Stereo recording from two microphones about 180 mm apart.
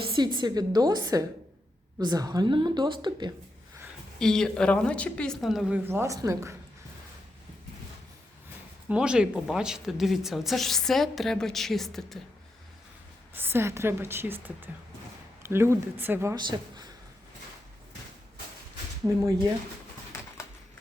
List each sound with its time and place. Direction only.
0.3 s a woman's voice: 25° right (ahead or behind)
4.2 s a woman's voice: 5° left (ahead or behind); by 6.6 s 15° right (ahead or behind)
8.9 s a woman's voice: 5° right (ahead or behind)
13.3 s speech: 10° right (ahead or behind)
16.5 s speech: 25° right (ahead or behind)
19.1 s speech: 20° right (ahead or behind)